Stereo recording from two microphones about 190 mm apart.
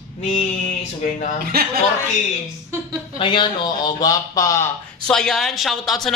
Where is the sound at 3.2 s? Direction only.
25° left (ahead or behind).